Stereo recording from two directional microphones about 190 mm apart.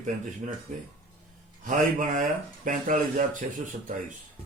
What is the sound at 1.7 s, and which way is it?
A man's voice, 40° right (ahead or behind).